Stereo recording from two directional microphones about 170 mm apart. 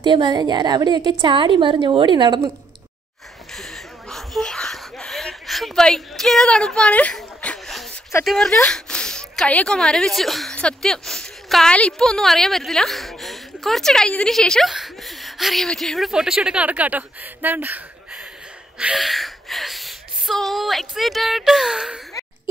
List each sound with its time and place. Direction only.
0.0 s a woman's voice: 25° right (ahead or behind)
3.5 s a sound: centre (ahead or behind)
8.3 s speech: 5° left (ahead or behind)